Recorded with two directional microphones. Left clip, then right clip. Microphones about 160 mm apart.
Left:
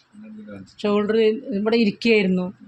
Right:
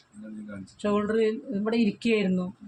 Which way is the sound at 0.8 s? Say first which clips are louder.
Left 6 dB; 55° left (ahead or behind).